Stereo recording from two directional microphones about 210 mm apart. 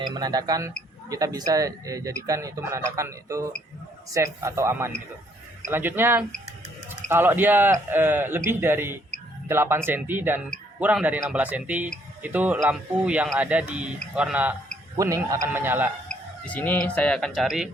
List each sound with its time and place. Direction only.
0.0 s a man's voice: 20° right (ahead or behind)
16.0 s speech: 5° left (ahead or behind)